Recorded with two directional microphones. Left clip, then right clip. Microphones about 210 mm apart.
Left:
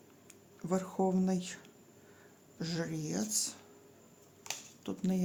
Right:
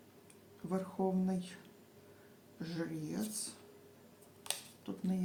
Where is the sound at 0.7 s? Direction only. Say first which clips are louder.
Left 4 dB; 55° left (ahead or behind).